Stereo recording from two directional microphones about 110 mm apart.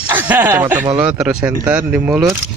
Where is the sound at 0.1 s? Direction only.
15° right (ahead or behind).